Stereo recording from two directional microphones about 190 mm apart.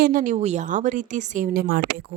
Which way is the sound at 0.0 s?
45° right (ahead or behind).